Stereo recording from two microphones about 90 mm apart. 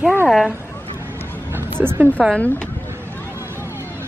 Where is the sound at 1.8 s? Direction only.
25° right (ahead or behind).